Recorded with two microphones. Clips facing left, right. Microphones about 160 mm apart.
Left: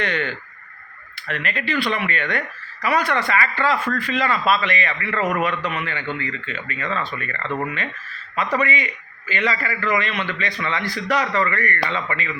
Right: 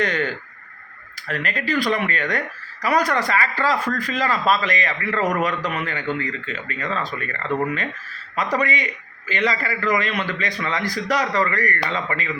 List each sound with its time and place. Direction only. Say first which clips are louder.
0.0 s speech: right 2 dB; 40° right (ahead or behind)
1.3 s speech: right 1 dB; 40° right (ahead or behind)